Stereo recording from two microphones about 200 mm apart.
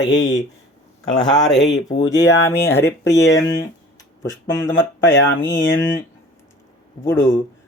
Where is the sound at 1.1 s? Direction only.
20° left (ahead or behind).